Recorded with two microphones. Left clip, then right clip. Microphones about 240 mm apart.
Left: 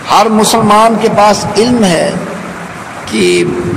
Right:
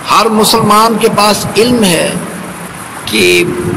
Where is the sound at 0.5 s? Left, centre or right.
Right.